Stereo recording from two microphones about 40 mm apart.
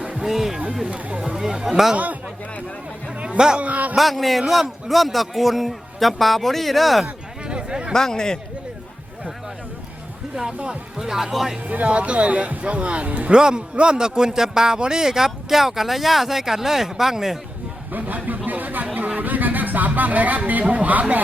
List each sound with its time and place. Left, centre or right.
0.2 s speech: centre
0.9 s speech: right
1.4 s a man's voice: centre
3.2 s music: right
3.6 s speech: right
3.9 s a man's voice: centre
7.0 s a sound: right
7.9 s speech: centre
10.9 s a man's voice: centre
11.7 s speech: right
13.3 s a man's voice: right
17.9 s speech: right